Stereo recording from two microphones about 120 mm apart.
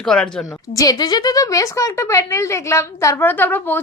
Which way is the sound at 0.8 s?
35° left (ahead or behind).